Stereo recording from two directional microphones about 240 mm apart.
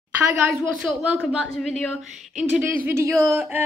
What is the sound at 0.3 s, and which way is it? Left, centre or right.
Speech, centre.